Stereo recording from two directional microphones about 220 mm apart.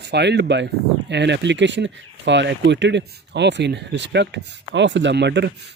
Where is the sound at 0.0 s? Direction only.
50° right (ahead or behind).